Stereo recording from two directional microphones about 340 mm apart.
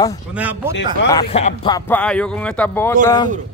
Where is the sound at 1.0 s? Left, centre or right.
Centre.